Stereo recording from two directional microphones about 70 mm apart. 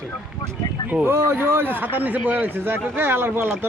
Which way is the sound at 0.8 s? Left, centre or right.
Right.